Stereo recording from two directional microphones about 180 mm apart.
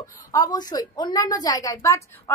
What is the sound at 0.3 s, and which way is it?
A woman's voice, 20° left (ahead or behind).